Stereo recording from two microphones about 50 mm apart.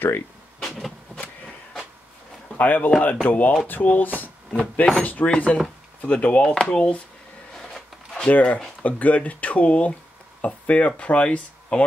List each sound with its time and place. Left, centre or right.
0.6 s vehicle: centre
2.6 s speech: left
4.5 s speech: left
7.6 s a sound: centre
8.3 s speech: left